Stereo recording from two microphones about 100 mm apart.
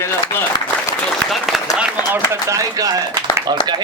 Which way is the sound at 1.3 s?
Centre (ahead or behind).